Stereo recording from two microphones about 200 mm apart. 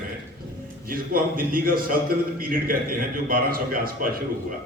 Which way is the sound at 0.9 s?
45° right (ahead or behind).